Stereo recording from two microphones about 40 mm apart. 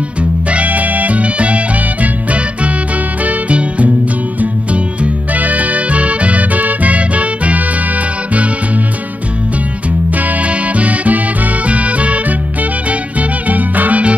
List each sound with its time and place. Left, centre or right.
0.2 s music: right
3.3 s music: right
10.1 s music: right
13.5 s music: right